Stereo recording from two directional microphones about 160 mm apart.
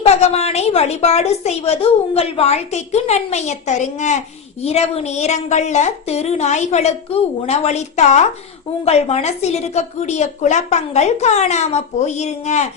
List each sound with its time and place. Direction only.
0.0 s a woman's voice: 40° left (ahead or behind)